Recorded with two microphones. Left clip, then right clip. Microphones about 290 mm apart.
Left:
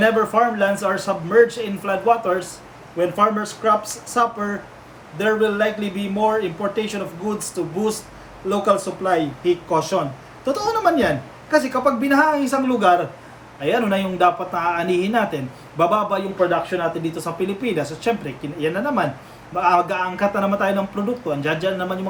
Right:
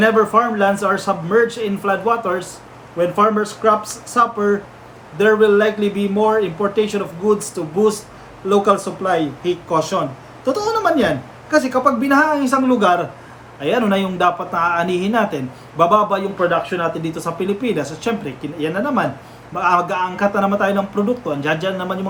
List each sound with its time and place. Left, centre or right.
0.0 s a man's voice: centre
8.4 s a man's voice: centre